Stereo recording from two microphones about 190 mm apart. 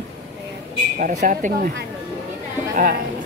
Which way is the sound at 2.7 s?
45° right (ahead or behind).